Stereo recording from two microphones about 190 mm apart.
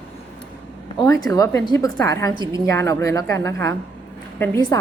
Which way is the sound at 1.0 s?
20° left (ahead or behind).